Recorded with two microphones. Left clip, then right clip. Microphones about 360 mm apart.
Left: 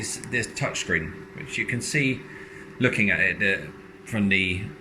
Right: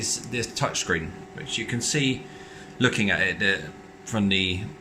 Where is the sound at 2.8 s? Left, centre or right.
Centre.